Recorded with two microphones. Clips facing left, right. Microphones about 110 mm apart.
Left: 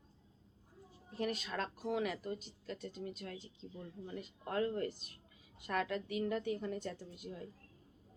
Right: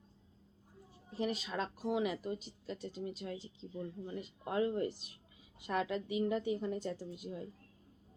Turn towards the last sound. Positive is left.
turn(degrees=-10)  # may be behind; listen again after turning